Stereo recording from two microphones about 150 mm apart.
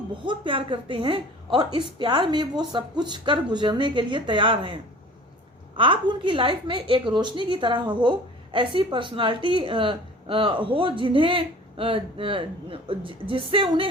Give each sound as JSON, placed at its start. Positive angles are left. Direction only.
{"t": 0.1, "sound": "a woman's voice", "side_deg": -35}